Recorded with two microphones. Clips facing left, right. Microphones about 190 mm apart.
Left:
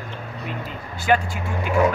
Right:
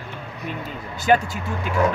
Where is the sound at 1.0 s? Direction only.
40° right (ahead or behind).